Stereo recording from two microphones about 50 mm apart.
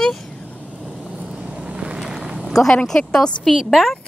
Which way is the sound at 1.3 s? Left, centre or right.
Right.